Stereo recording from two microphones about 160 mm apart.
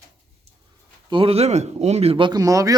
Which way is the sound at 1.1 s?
35° right (ahead or behind).